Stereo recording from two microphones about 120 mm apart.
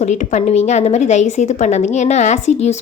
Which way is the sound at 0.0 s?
90° left.